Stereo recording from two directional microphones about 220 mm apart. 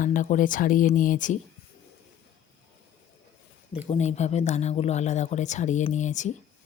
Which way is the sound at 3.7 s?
30° left (ahead or behind).